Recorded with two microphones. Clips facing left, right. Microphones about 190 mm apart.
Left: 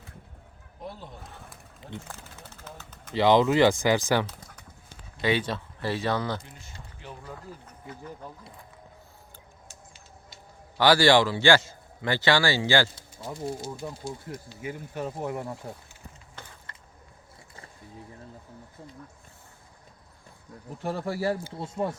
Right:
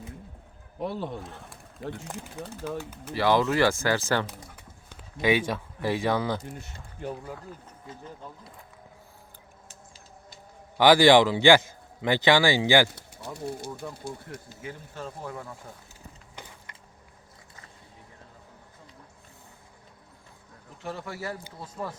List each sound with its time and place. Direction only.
0.8 s speech: 75° right (ahead or behind)
1.2 s speech: centre (ahead or behind)
2.0 s a man's voice: 15° right (ahead or behind)
3.2 s speech: 20° left (ahead or behind)
4.9 s speech: 10° right (ahead or behind)
6.4 s speech: 45° right (ahead or behind)
10.8 s a man's voice: 15° right (ahead or behind)
13.0 s bird: 65° right (ahead or behind)
13.8 s speech: 10° left (ahead or behind)
15.6 s speech: 30° left (ahead or behind)
16.3 s a sound: 15° right (ahead or behind)
20.8 s speech: 35° left (ahead or behind)